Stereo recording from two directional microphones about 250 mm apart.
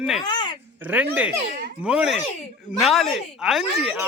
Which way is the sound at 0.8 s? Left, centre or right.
Centre.